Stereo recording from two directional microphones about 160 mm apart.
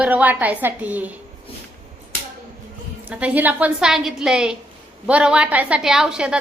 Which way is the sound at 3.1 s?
10° right (ahead or behind).